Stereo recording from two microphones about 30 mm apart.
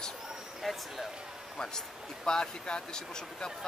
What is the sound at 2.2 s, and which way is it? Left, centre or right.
Speech, left.